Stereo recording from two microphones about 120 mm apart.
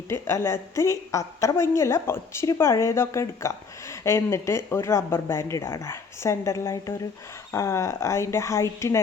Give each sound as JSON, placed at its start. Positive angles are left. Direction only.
{"t": 0.1, "sound": "a woman's voice", "side_deg": 25}